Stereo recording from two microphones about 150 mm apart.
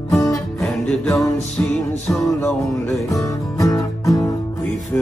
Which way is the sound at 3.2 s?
20° left (ahead or behind).